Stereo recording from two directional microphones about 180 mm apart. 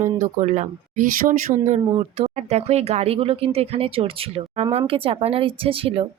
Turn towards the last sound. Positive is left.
turn(degrees=-30)  # may be behind; listen again after turning